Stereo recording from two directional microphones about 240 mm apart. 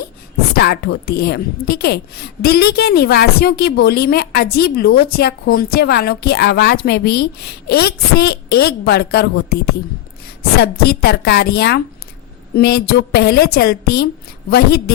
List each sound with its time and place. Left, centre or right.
0.5 s a woman's voice: left